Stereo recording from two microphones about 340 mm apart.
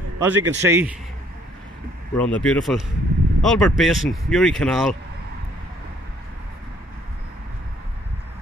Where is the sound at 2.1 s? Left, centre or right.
Centre.